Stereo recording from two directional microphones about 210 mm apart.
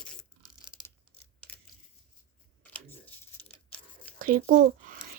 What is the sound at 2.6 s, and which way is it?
Whispering, 5° left (ahead or behind).